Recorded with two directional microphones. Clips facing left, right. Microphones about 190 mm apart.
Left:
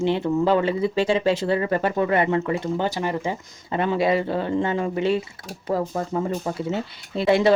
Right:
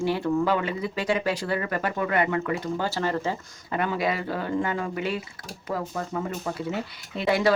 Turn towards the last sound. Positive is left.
turn(degrees=25)  # may be behind; listen again after turning